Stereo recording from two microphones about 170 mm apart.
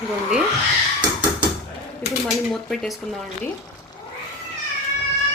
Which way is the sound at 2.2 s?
Centre (ahead or behind).